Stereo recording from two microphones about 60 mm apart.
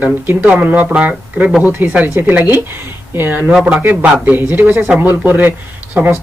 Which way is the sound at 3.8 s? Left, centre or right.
Right.